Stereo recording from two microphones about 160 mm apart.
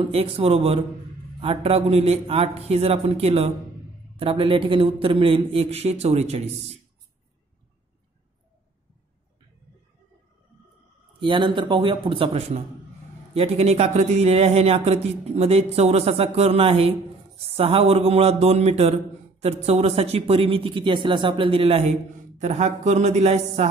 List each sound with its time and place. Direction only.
0.0 s speech: 40° right (ahead or behind)
11.1 s speech: 30° right (ahead or behind)